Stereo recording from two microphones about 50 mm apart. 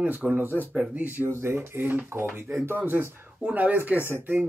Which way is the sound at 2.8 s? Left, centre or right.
Right.